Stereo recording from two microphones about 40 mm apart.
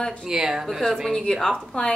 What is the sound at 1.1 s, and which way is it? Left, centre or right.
Speech, centre.